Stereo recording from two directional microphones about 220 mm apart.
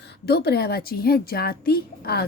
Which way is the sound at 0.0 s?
50° left (ahead or behind).